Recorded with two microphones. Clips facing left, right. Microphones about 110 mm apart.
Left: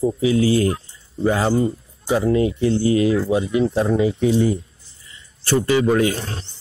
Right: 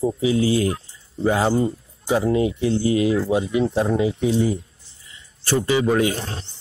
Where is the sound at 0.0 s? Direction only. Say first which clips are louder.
Left 2 dB; 25° right (ahead or behind).